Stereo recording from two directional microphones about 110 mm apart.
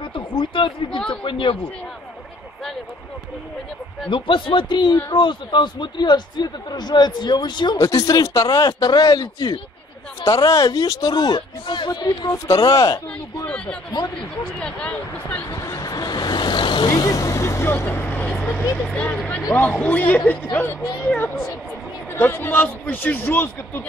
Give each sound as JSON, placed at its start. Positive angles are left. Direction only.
{"t": 0.1, "sound": "speech", "side_deg": 50}
{"t": 4.1, "sound": "speech", "side_deg": 50}
{"t": 14.6, "sound": "speech", "side_deg": 10}
{"t": 15.5, "sound": "vehicle", "side_deg": 35}
{"t": 16.9, "sound": "vehicle", "side_deg": 35}
{"t": 18.8, "sound": "speech", "side_deg": 10}